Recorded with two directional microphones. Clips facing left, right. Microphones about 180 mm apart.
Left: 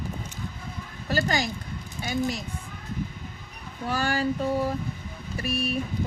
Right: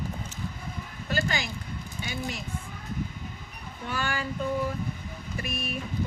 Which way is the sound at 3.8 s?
40° left (ahead or behind).